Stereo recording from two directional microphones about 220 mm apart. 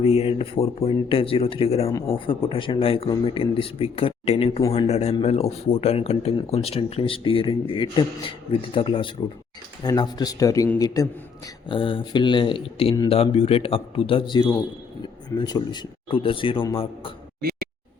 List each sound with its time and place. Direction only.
0.0 s a man's voice: 30° left (ahead or behind)